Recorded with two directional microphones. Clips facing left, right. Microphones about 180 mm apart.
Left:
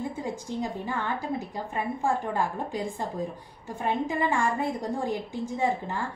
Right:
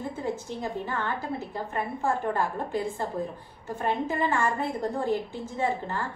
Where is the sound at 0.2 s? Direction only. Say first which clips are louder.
Even; 15° left (ahead or behind).